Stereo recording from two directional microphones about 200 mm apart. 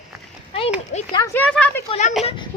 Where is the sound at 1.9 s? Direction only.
35° left (ahead or behind).